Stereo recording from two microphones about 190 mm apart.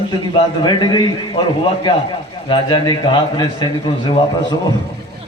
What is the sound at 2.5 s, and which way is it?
A man's voice, 25° left (ahead or behind).